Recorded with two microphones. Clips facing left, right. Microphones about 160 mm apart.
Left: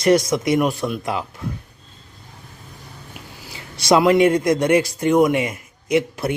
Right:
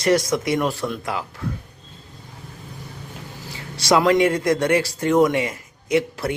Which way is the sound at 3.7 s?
20° left (ahead or behind).